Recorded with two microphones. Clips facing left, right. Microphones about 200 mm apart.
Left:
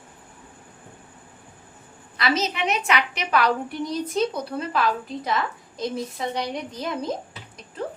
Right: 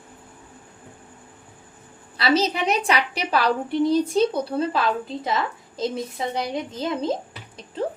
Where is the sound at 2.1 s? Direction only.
30° right (ahead or behind).